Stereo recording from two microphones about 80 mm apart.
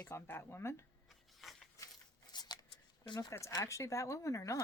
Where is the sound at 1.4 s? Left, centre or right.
Centre.